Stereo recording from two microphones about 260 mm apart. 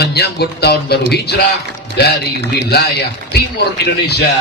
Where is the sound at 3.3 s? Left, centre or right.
Left.